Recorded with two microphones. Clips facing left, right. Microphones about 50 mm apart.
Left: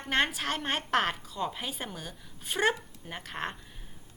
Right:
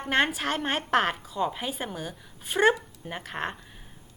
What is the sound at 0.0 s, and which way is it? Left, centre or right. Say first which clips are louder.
A woman's voice: right 4 dB; centre.